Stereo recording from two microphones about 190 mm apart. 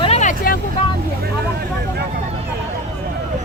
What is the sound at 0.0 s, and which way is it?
Vehicle, 35° left (ahead or behind).